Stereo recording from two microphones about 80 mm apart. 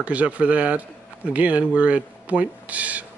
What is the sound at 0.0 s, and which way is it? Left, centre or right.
Speech, centre.